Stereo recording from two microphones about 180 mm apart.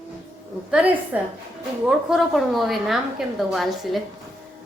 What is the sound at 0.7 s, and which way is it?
A woman's voice, 10° right (ahead or behind).